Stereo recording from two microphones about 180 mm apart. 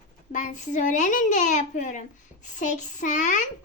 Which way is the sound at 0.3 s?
45° left (ahead or behind).